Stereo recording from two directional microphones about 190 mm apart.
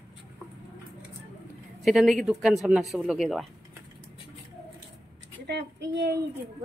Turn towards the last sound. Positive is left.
turn(degrees=-65)  # may be behind; listen again after turning